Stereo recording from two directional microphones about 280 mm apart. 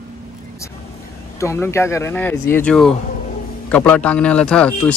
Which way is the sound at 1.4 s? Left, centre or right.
Centre.